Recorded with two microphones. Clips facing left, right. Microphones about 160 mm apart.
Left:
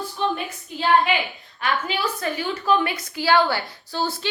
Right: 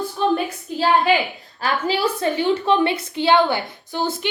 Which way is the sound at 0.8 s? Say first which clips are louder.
Right 2 dB; 35° right (ahead or behind).